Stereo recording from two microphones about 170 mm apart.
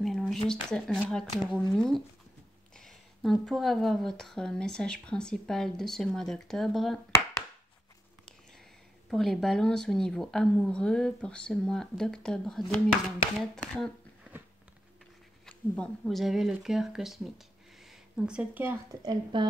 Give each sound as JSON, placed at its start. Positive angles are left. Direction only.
{"t": 0.0, "sound": "a sound", "side_deg": 0}
{"t": 0.5, "sound": "speech", "side_deg": 5}
{"t": 9.1, "sound": "speech", "side_deg": 0}
{"t": 15.4, "sound": "speech", "side_deg": 5}
{"t": 19.3, "sound": "a woman's voice", "side_deg": -25}